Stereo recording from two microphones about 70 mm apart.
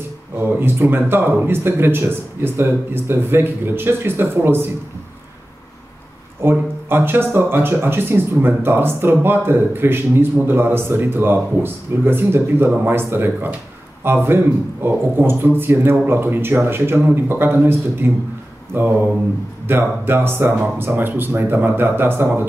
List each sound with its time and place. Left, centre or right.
0.4 s speech: right
6.4 s speech: right
18.8 s a sound: right
19.7 s speech: right